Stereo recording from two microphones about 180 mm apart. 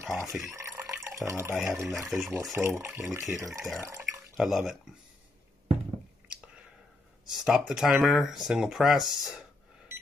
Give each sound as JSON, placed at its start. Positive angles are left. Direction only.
{"t": 0.0, "sound": "speech", "side_deg": -15}
{"t": 3.8, "sound": "water", "side_deg": -15}
{"t": 4.4, "sound": "speech", "side_deg": 0}
{"t": 7.2, "sound": "speech", "side_deg": -5}